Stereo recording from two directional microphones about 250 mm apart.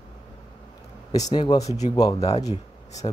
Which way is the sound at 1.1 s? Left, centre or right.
Centre.